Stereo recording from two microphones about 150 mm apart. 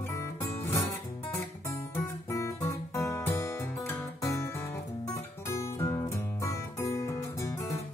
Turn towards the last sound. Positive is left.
turn(degrees=20)  # may be behind; listen again after turning